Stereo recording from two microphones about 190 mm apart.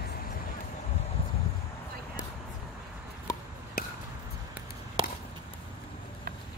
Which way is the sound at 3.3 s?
15° left (ahead or behind).